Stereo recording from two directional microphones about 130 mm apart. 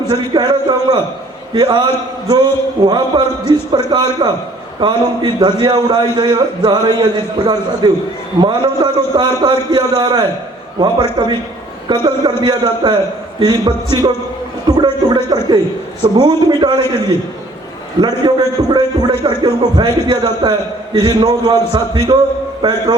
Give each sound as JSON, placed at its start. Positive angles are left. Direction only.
{"t": 0.1, "sound": "speech", "side_deg": -35}
{"t": 18.2, "sound": "speech", "side_deg": -40}